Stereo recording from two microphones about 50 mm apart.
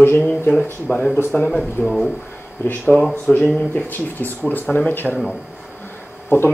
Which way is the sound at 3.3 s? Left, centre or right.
Left.